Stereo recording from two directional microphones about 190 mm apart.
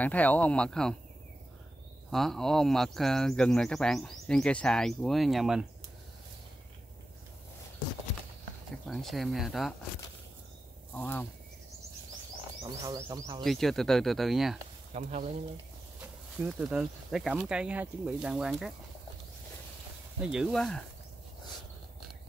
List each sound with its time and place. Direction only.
0.0 s speech: 10° left (ahead or behind)
2.0 s speech: centre (ahead or behind)
8.8 s speech: centre (ahead or behind)
11.0 s speech: 10° left (ahead or behind)
12.6 s speech: 20° right (ahead or behind)
13.4 s speech: centre (ahead or behind)
15.0 s speech: 35° right (ahead or behind)
16.3 s speech: 5° right (ahead or behind)
20.2 s speech: 5° right (ahead or behind)